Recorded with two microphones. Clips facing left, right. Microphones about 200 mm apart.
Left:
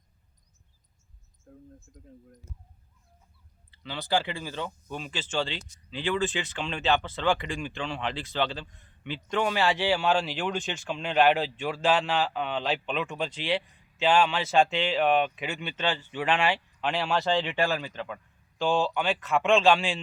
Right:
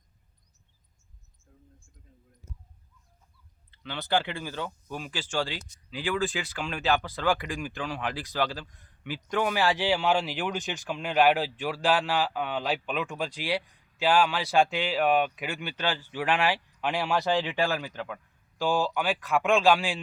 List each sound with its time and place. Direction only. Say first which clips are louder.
1.5 s speech: left 10 dB; 55° left (ahead or behind)
3.8 s speech: even; centre (ahead or behind)